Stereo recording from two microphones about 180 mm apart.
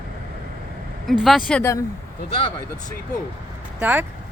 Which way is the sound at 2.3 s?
30° left (ahead or behind).